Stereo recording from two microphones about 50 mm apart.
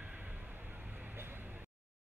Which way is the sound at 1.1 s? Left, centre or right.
Right.